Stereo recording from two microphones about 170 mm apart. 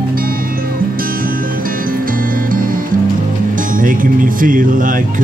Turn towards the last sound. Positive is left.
turn(degrees=-50)  # may be behind; listen again after turning